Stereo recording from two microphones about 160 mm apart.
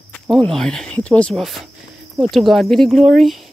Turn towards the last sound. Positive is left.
turn(degrees=0)  # may be behind; listen again after turning